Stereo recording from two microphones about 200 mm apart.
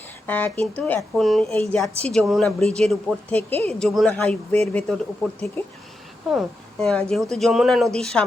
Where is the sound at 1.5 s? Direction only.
10° left (ahead or behind).